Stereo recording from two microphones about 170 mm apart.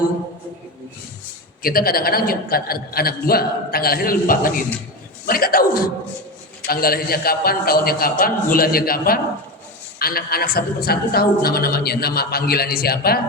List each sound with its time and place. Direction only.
1.6 s a woman's voice: 60° left (ahead or behind)